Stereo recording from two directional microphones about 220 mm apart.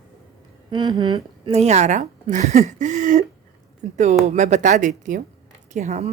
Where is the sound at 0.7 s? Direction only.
20° right (ahead or behind).